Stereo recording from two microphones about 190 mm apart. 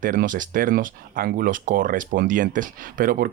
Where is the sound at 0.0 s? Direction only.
45° right (ahead or behind).